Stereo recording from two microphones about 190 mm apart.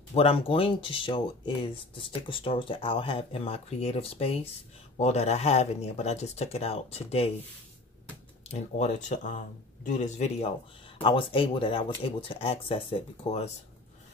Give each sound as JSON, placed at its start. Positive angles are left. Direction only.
{"t": 0.1, "sound": "speech", "side_deg": 30}
{"t": 8.5, "sound": "speech", "side_deg": 35}
{"t": 11.0, "sound": "speech", "side_deg": 25}